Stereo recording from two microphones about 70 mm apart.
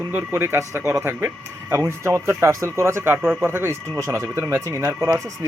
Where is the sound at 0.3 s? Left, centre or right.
Right.